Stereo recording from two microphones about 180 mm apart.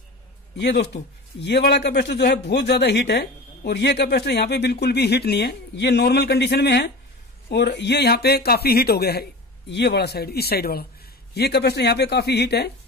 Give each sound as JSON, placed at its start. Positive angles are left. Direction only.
{"t": 0.6, "sound": "a man's voice", "side_deg": 70}